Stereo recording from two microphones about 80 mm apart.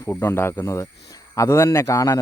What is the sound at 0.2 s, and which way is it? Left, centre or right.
Speech, left.